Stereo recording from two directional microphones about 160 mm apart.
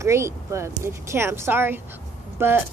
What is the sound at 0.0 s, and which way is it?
Speech, 20° right (ahead or behind).